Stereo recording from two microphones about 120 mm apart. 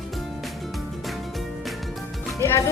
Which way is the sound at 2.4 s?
25° left (ahead or behind).